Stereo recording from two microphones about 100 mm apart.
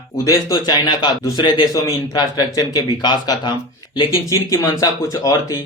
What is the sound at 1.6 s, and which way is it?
A man's voice, 40° left (ahead or behind).